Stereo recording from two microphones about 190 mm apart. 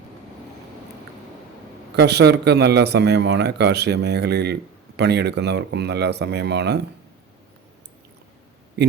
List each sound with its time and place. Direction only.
2.0 s a man's voice: 60° right (ahead or behind)